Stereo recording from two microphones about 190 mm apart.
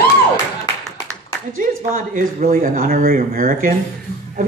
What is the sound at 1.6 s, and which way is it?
Speech, 45° right (ahead or behind).